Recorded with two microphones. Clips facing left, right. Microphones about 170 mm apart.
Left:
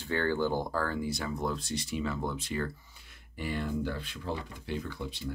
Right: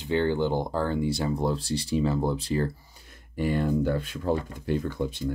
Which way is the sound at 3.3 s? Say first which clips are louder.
Right 8 dB; 45° right (ahead or behind).